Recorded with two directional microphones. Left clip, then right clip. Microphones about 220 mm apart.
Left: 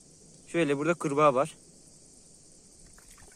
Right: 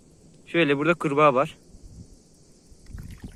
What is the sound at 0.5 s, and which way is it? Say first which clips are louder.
Speech: right 6 dB; 5° left (ahead or behind).